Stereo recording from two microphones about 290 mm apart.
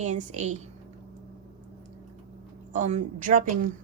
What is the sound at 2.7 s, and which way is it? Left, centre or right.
Speech, right.